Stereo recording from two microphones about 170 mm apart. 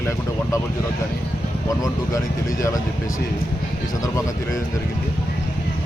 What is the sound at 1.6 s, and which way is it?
Speech, 20° left (ahead or behind).